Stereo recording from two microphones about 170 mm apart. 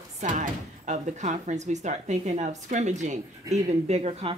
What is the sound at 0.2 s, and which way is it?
A woman's voice, 45° right (ahead or behind).